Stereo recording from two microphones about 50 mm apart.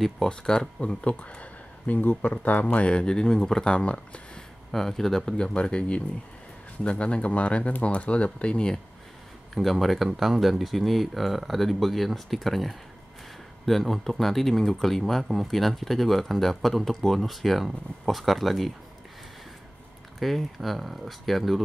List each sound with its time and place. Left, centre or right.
0.3 s speech: centre
4.6 s speech: centre
9.5 s speech: centre
20.2 s speech: centre